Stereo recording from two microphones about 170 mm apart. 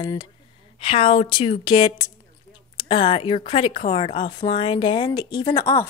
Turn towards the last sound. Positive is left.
turn(degrees=20)  # may be behind; listen again after turning